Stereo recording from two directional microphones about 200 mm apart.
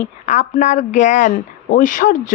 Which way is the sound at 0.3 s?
40° left (ahead or behind).